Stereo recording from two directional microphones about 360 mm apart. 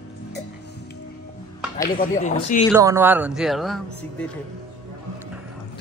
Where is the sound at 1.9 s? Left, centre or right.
Left.